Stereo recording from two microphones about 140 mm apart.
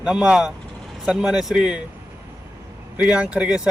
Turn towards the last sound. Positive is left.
turn(degrees=-5)  # may be behind; listen again after turning